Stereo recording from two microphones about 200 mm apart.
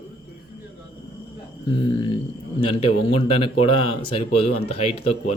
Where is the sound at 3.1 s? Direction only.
30° left (ahead or behind).